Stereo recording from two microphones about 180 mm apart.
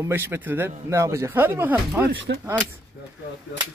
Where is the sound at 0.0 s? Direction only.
10° right (ahead or behind).